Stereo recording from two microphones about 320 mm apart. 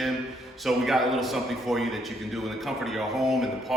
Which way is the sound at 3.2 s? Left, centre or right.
Centre.